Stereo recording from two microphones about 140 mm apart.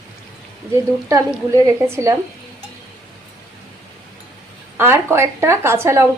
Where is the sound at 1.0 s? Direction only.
25° right (ahead or behind).